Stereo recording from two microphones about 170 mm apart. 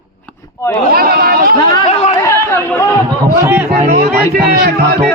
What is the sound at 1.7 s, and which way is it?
Speech, 35° left (ahead or behind).